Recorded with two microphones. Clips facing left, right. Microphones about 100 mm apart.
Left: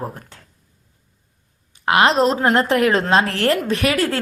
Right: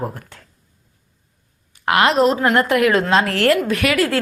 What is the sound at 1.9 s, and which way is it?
A woman's voice, 25° left (ahead or behind).